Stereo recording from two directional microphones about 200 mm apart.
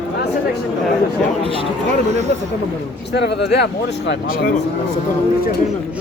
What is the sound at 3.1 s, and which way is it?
Speech, 55° left (ahead or behind).